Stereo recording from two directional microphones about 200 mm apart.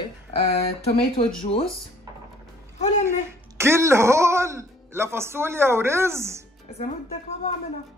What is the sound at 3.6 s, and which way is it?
Speech, 15° right (ahead or behind).